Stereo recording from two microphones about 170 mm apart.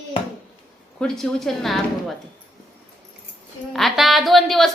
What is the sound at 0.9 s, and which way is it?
A woman's voice, 5° left (ahead or behind).